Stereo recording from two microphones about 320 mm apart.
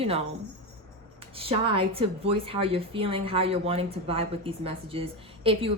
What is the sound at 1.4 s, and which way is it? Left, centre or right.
A woman's voice, centre.